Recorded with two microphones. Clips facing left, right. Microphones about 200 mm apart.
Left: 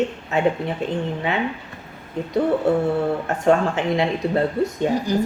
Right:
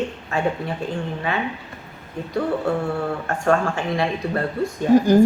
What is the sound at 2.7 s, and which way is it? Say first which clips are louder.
A woman's voice: left 4 dB; 20° left (ahead or behind).